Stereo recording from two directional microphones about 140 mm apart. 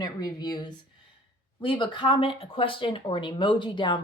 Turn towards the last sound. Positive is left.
turn(degrees=35)  # may be behind; listen again after turning